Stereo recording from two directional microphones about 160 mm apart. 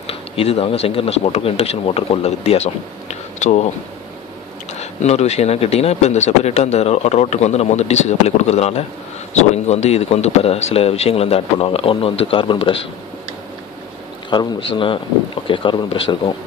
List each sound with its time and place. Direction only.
0.0 s speech: 40° left (ahead or behind)
4.7 s speech: 45° left (ahead or behind)
14.3 s speech: 30° left (ahead or behind)